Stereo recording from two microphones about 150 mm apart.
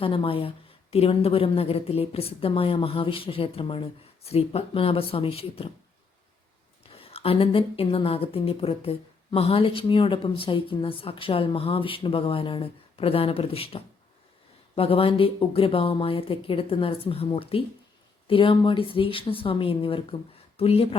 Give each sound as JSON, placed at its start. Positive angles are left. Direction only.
{"t": 0.0, "sound": "a woman's voice", "side_deg": 35}
{"t": 6.8, "sound": "a woman's voice", "side_deg": 40}